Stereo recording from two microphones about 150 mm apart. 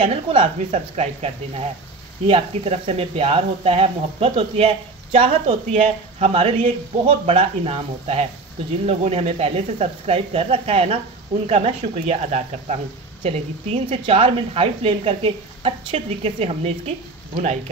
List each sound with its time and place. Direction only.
0.0 s speech: 40° right (ahead or behind)